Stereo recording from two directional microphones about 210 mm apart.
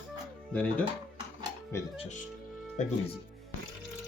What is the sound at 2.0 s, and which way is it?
Speech, 35° left (ahead or behind).